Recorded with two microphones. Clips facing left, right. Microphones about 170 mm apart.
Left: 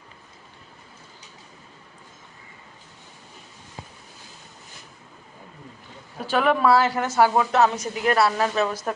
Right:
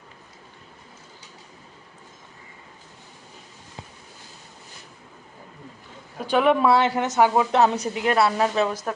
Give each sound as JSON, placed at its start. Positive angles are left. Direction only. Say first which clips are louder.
{"t": 6.3, "sound": "speech", "louder": "right 1 dB", "side_deg": -20}
{"t": 7.6, "sound": "speech", "louder": "even", "side_deg": -30}